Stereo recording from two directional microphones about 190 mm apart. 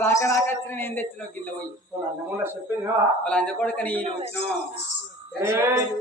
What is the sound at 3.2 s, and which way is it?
Speech, 5° left (ahead or behind).